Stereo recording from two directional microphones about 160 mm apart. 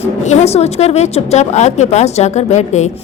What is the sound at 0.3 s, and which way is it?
A woman's voice, 45° left (ahead or behind).